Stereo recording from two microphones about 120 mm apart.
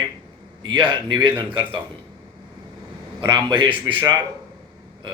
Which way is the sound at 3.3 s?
40° right (ahead or behind).